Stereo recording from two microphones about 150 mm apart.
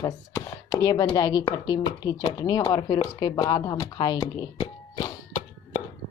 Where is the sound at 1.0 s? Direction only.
25° left (ahead or behind).